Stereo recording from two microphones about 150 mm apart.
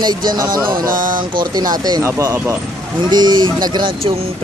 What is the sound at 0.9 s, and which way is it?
Speech, 65° right (ahead or behind).